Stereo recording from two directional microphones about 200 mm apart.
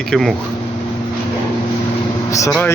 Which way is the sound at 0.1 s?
Centre (ahead or behind).